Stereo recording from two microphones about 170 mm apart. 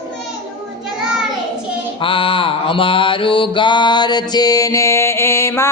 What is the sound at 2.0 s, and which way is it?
Mantra, 30° left (ahead or behind).